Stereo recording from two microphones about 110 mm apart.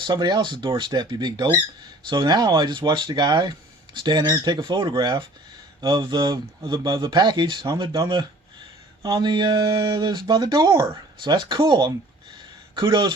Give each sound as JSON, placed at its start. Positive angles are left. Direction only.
{"t": 0.0, "sound": "speech", "side_deg": -40}